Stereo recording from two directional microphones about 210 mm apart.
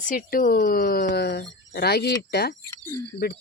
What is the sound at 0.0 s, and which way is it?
Speech, 40° left (ahead or behind).